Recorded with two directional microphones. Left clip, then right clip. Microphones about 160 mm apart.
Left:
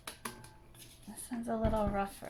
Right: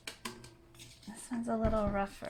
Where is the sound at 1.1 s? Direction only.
25° right (ahead or behind).